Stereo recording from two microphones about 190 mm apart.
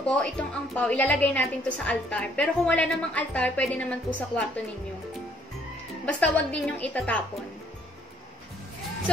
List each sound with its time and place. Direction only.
0.0 s a woman's voice: 5° left (ahead or behind)
6.0 s a woman's voice: 5° left (ahead or behind)